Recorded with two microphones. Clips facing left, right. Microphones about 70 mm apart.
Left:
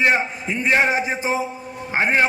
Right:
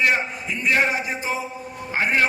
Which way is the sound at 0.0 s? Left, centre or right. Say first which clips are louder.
Left 2 dB; left.